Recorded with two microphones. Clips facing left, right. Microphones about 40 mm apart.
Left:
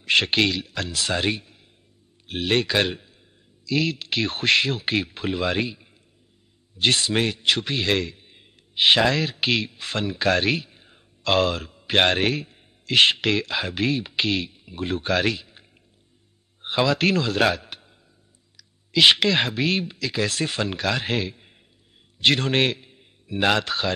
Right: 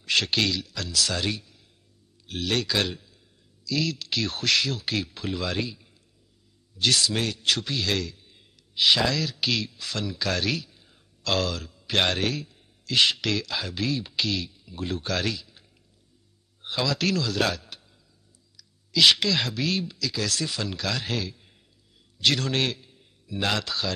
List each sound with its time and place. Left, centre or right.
0.0 s a man's voice: left
16.6 s a man's voice: left